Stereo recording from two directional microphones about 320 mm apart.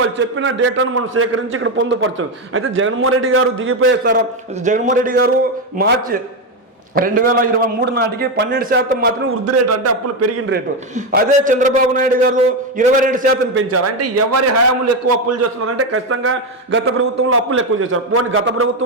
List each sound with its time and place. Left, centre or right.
0.2 s a man's voice: right
4.6 s a man's voice: right
9.5 s a man's voice: right
10.5 s a man's voice: right